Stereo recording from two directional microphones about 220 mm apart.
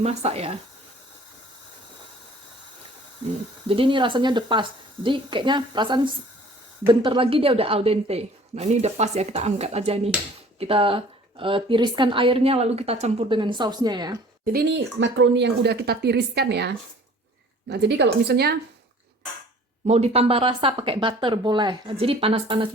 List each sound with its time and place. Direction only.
0.0 s a woman's voice: 30° right (ahead or behind)
3.7 s a woman's voice: 25° right (ahead or behind)
14.4 s speech: 45° right (ahead or behind)
19.9 s a woman's voice: 30° right (ahead or behind)